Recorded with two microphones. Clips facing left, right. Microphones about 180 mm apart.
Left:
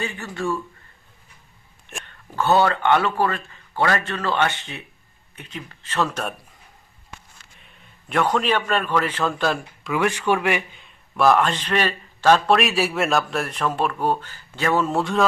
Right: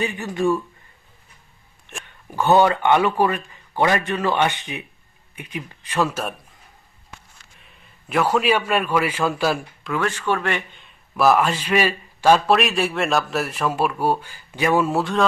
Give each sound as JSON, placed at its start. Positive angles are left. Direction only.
{"t": 0.0, "sound": "speech", "side_deg": -15}
{"t": 2.0, "sound": "a man's voice", "side_deg": -15}
{"t": 7.6, "sound": "a man's voice", "side_deg": 0}
{"t": 9.9, "sound": "a man's voice", "side_deg": 15}